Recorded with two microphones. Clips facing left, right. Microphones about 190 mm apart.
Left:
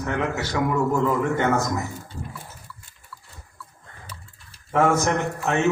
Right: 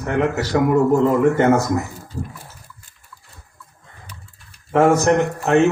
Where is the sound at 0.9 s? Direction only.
35° right (ahead or behind).